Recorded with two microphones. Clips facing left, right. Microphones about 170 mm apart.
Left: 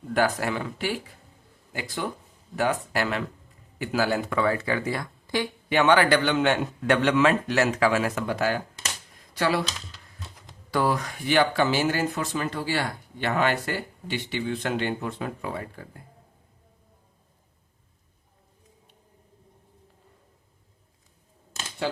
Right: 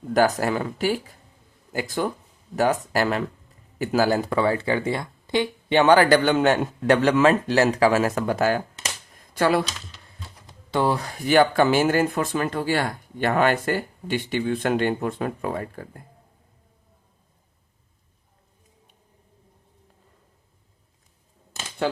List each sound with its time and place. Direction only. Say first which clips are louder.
0.1 s speech: right 4 dB; 40° right (ahead or behind)
10.7 s speech: right 2 dB; 25° right (ahead or behind); by 15.9 s 50° right (ahead or behind)